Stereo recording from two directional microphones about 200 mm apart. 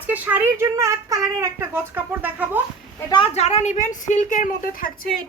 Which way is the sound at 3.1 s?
30° left (ahead or behind).